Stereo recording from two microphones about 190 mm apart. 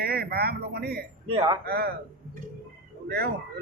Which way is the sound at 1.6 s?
55° right (ahead or behind).